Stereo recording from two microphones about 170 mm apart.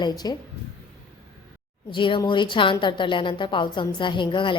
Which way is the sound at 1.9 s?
30° left (ahead or behind).